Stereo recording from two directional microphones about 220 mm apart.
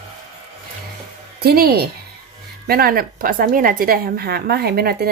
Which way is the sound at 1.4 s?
45° right (ahead or behind).